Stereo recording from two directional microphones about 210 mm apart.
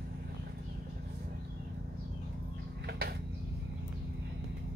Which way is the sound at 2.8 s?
50° right (ahead or behind).